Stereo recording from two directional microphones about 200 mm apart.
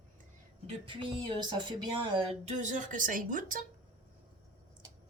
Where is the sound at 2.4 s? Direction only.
35° right (ahead or behind).